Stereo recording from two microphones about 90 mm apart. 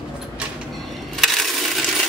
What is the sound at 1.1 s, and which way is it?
Coin, centre (ahead or behind).